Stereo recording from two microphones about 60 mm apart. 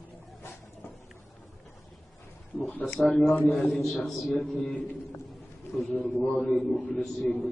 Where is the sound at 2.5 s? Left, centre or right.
Left.